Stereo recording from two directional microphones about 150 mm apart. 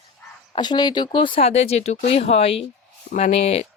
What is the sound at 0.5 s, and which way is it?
Speech, 30° left (ahead or behind).